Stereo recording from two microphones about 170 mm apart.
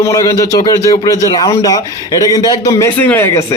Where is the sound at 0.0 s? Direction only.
20° left (ahead or behind).